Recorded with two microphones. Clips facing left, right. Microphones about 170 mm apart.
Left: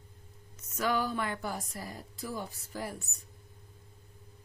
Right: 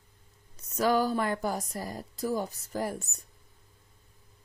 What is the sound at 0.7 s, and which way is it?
Speech, 35° right (ahead or behind).